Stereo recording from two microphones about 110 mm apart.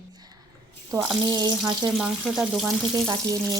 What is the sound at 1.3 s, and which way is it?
Speech, 40° right (ahead or behind).